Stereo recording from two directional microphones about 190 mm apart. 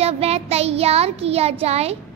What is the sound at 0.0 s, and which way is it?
Child singing, 30° right (ahead or behind).